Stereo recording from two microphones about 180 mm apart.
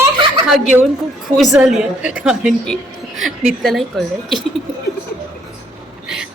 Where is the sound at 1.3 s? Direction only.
Centre (ahead or behind).